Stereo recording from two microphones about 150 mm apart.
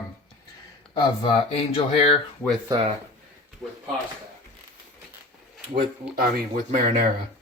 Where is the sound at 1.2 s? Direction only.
40° left (ahead or behind).